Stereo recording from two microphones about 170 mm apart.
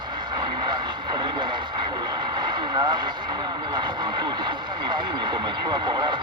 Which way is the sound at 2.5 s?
25° right (ahead or behind).